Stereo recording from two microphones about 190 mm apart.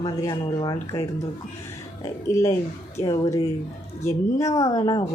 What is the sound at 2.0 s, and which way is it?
Speech, 15° left (ahead or behind).